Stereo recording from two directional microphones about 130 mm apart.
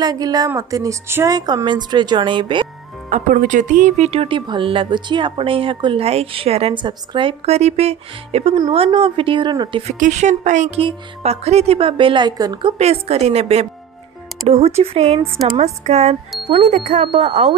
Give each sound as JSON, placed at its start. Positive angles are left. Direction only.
{"t": 0.0, "sound": "speech", "side_deg": -30}
{"t": 1.3, "sound": "speech", "side_deg": -30}
{"t": 3.1, "sound": "speech", "side_deg": -75}
{"t": 6.7, "sound": "speech", "side_deg": -35}
{"t": 7.4, "sound": "speech", "side_deg": -55}
{"t": 9.9, "sound": "speech", "side_deg": -65}
{"t": 10.8, "sound": "speech", "side_deg": -50}
{"t": 12.7, "sound": "a woman's voice", "side_deg": -55}